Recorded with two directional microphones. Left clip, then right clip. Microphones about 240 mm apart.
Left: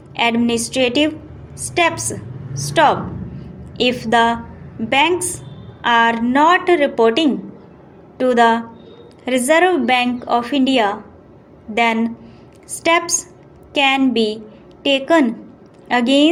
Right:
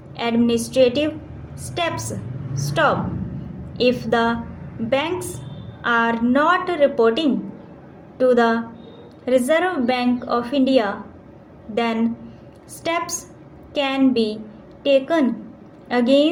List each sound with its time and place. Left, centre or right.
0.2 s a woman's voice: left
2.6 s a woman's voice: left